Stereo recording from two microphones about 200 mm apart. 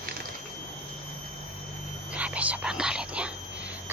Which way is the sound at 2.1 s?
5° right (ahead or behind).